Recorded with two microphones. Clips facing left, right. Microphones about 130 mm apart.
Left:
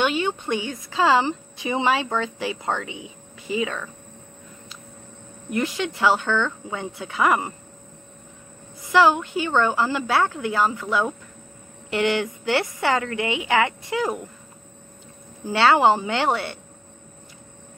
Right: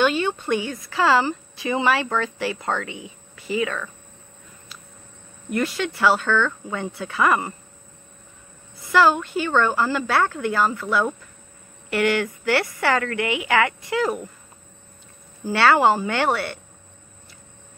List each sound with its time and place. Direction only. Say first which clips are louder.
0.0 s speech: right 2 dB; 20° left (ahead or behind)
5.5 s a woman's voice: right 1 dB; 20° left (ahead or behind)
8.8 s a woman's voice: even; 15° left (ahead or behind)
15.4 s speech: even; 20° left (ahead or behind)